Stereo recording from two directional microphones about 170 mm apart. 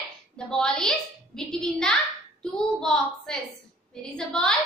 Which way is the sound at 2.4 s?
5° left (ahead or behind).